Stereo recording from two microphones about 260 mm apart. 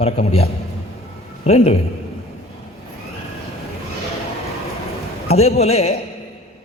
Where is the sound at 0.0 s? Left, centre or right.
Left.